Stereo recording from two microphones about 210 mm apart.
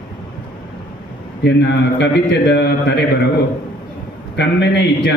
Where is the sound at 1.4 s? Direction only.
55° left (ahead or behind).